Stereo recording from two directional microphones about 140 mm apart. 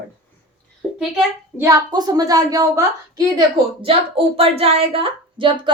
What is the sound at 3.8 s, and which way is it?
Speech, 40° right (ahead or behind).